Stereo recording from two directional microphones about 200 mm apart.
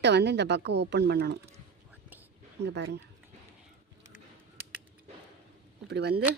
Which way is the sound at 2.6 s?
60° right (ahead or behind).